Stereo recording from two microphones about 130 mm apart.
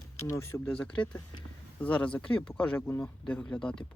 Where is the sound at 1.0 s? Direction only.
30° left (ahead or behind).